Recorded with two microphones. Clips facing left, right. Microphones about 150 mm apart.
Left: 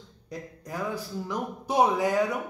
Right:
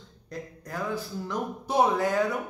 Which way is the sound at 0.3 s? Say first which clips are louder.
Even; 15° left (ahead or behind).